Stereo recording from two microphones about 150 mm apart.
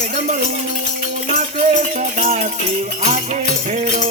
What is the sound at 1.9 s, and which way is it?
Music, 50° right (ahead or behind).